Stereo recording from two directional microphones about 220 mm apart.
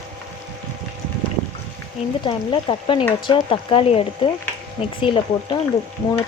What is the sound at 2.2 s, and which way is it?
Speech, 20° left (ahead or behind).